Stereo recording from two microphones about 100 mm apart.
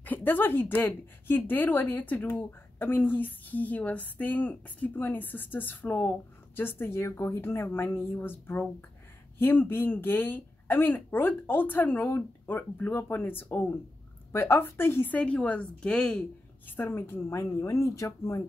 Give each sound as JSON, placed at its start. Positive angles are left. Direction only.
{"t": 0.0, "sound": "a woman's voice", "side_deg": 20}
{"t": 16.6, "sound": "a woman's voice", "side_deg": 20}